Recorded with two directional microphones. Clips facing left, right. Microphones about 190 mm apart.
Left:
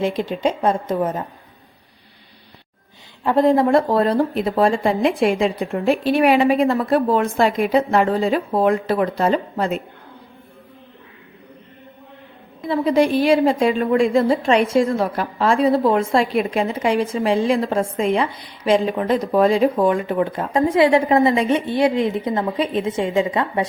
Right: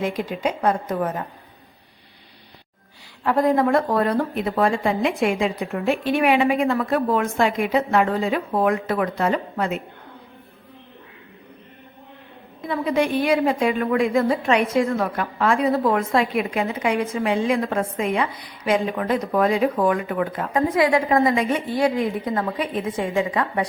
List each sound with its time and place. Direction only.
0.0 s a woman's voice: 30° left (ahead or behind)
3.2 s speech: 25° left (ahead or behind)
12.6 s a woman's voice: 30° left (ahead or behind)